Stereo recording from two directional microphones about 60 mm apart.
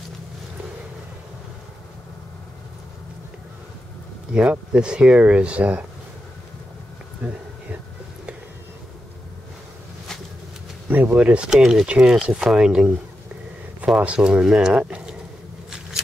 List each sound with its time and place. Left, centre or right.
4.3 s speech: centre
11.1 s speech: centre